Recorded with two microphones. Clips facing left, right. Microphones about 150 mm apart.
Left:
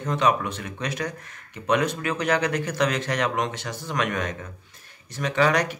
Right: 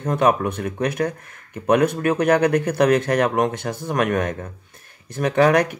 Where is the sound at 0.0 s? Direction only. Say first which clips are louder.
Right 4 dB; 55° right (ahead or behind).